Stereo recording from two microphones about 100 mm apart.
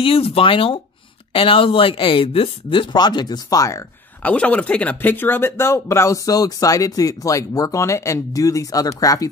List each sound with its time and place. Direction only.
0.0 s speech: 75° left (ahead or behind); by 3.8 s 35° left (ahead or behind)
4.2 s speech: 15° left (ahead or behind); by 9.3 s 35° left (ahead or behind)